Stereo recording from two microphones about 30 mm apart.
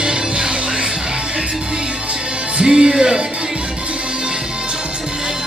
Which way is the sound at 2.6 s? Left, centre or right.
Right.